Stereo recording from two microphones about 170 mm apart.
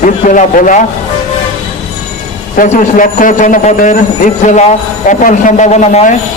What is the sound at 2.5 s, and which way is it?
A man's voice, 50° left (ahead or behind).